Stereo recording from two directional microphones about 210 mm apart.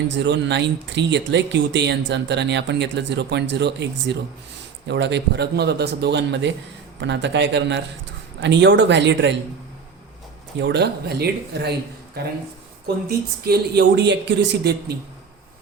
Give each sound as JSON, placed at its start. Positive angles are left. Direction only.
{"t": 0.1, "sound": "speech", "side_deg": -55}
{"t": 10.6, "sound": "speech", "side_deg": -55}
{"t": 13.4, "sound": "speech", "side_deg": -50}